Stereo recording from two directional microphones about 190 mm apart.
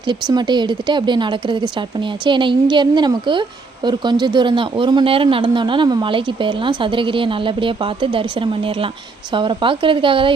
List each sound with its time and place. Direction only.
0.1 s speech: 25° right (ahead or behind)